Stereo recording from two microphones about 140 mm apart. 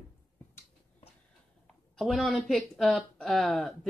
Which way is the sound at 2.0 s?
Centre (ahead or behind).